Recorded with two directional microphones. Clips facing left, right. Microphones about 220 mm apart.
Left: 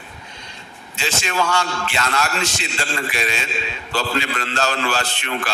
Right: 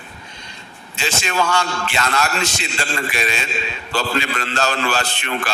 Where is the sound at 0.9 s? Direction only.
50° right (ahead or behind).